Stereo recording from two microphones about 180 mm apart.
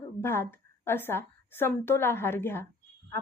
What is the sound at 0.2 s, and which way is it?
A woman's voice, 15° left (ahead or behind).